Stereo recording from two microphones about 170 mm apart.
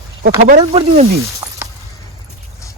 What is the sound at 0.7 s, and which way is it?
Speech, 35° right (ahead or behind).